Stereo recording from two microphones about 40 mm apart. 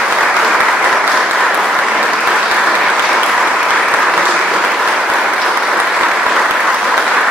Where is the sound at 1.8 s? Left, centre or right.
Centre.